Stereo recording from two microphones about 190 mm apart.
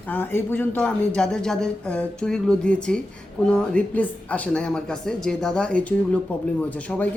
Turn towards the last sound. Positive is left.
turn(degrees=5)  # may be behind; listen again after turning